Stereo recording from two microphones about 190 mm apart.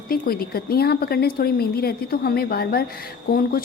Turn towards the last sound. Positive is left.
turn(degrees=50)  # may be behind; listen again after turning